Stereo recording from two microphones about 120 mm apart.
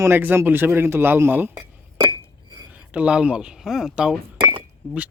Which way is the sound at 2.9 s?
10° right (ahead or behind).